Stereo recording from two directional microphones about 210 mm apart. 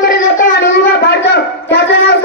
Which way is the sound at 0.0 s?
50° left (ahead or behind).